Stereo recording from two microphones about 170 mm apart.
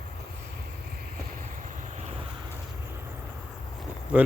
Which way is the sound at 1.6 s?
45° right (ahead or behind).